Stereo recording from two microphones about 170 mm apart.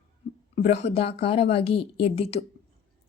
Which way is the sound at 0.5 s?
40° left (ahead or behind).